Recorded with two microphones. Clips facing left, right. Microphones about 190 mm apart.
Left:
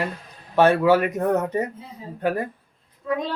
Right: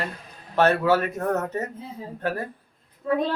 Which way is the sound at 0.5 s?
10° left (ahead or behind).